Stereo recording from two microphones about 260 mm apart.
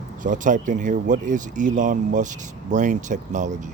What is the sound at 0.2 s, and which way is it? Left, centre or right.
Speech, right.